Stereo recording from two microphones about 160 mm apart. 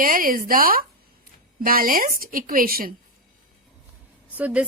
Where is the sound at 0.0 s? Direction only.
60° right (ahead or behind).